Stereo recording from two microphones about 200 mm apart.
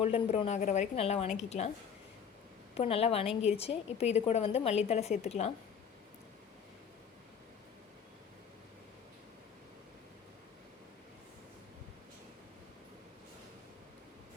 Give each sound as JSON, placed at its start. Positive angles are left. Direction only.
{"t": 0.0, "sound": "a woman's voice", "side_deg": 30}
{"t": 2.7, "sound": "a woman's voice", "side_deg": 30}